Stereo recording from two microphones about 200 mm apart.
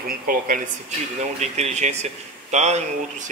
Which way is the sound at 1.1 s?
35° right (ahead or behind).